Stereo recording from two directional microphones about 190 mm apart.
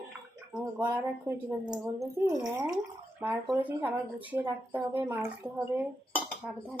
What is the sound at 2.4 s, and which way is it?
Speech, 20° right (ahead or behind).